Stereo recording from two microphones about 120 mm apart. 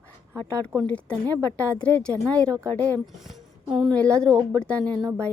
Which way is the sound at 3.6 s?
45° right (ahead or behind).